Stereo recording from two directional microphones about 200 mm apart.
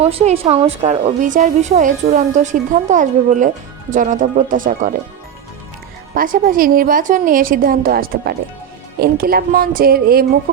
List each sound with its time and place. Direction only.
0.0 s a woman's voice: 30° right (ahead or behind)
6.1 s a woman's voice: 45° right (ahead or behind)